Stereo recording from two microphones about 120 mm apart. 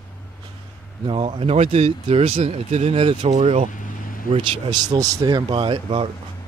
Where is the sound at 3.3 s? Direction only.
75° right (ahead or behind).